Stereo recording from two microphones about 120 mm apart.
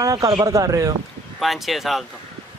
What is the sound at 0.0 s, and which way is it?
Speech, 30° right (ahead or behind).